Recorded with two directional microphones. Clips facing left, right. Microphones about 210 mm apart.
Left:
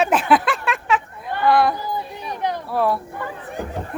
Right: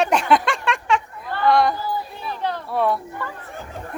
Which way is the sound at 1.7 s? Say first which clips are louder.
Even; 15° left (ahead or behind).